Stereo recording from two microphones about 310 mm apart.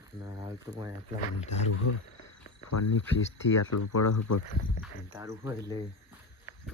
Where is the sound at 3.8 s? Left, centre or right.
Left.